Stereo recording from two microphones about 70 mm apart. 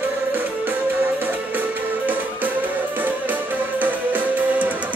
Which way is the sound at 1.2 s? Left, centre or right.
Right.